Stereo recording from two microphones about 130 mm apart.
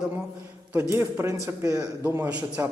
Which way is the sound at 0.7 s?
20° right (ahead or behind).